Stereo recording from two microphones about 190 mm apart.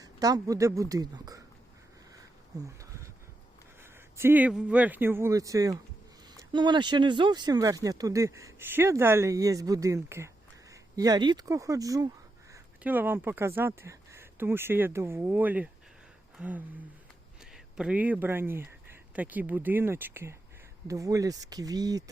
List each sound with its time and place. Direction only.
0.0 s speech: 20° right (ahead or behind)
2.5 s speech: 20° right (ahead or behind)
4.2 s speech: 10° right (ahead or behind)
17.7 s speech: 5° right (ahead or behind)